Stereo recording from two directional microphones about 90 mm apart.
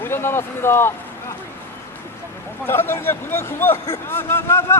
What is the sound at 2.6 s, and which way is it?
Speech, 25° left (ahead or behind).